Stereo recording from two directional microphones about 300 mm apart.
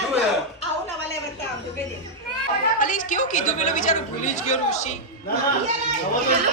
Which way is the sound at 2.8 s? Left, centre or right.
Left.